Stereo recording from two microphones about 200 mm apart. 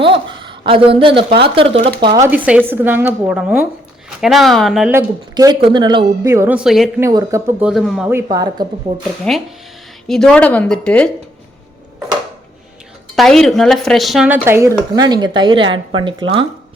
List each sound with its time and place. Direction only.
0.0 s speech: 25° right (ahead or behind)
2.2 s a woman's voice: 10° right (ahead or behind)
4.9 s a woman's voice: 20° right (ahead or behind); by 6.9 s centre (ahead or behind)
7.0 s a woman's voice: 15° right (ahead or behind)
7.7 s speech: centre (ahead or behind)
8.3 s speech: 20° right (ahead or behind)
9.3 s speech: 5° left (ahead or behind)
13.1 s speech: centre (ahead or behind); by 16.5 s 25° right (ahead or behind)